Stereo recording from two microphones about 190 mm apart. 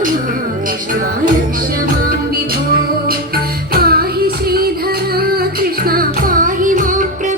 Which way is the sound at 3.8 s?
55° right (ahead or behind).